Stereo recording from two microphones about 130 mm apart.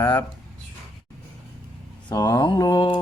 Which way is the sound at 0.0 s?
15° left (ahead or behind).